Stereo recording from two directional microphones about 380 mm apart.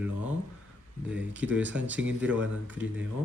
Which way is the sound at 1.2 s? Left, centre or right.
Centre.